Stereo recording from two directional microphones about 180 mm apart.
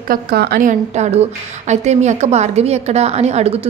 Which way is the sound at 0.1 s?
60° right (ahead or behind).